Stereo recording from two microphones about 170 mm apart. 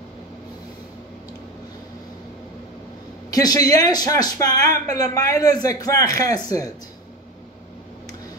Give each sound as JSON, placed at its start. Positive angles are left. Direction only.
{"t": 3.3, "sound": "a man's voice", "side_deg": 20}